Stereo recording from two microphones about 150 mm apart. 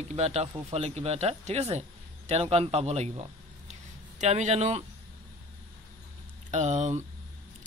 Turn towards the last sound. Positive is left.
turn(degrees=-50)  # may be behind; listen again after turning